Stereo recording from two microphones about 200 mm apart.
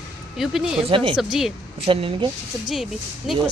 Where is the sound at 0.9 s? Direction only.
25° right (ahead or behind).